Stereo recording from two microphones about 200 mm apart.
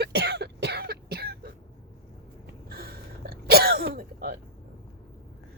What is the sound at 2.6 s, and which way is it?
Throat clearing, 50° right (ahead or behind).